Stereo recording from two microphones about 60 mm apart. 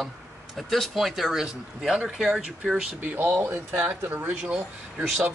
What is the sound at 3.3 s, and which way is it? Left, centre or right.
Speech, right.